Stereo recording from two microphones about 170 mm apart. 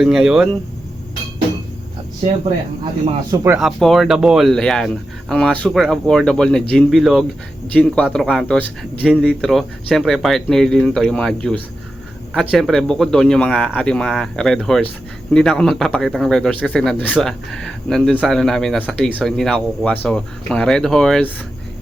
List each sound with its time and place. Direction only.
0.0 s speech: centre (ahead or behind)
3.3 s speech: 15° right (ahead or behind)
3.6 s speech: centre (ahead or behind)
9.0 s speech: 10° right (ahead or behind)